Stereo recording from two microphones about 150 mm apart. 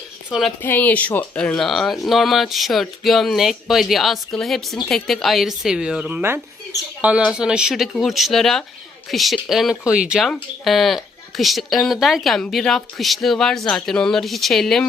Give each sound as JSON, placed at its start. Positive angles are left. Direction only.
{"t": 0.3, "sound": "a woman's voice", "side_deg": 0}
{"t": 0.6, "sound": "speech", "side_deg": 10}